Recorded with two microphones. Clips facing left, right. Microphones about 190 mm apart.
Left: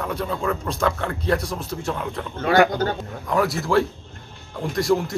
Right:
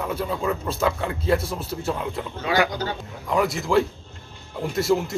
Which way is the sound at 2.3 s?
50° left (ahead or behind).